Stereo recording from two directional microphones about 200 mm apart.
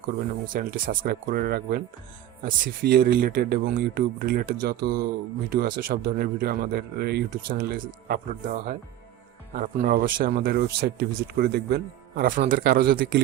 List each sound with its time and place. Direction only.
0.4 s speech: 45° right (ahead or behind)